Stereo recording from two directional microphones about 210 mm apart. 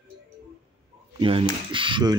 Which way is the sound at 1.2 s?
25° right (ahead or behind).